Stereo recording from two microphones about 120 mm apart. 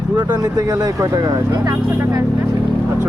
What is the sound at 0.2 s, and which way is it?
Speech, 30° right (ahead or behind).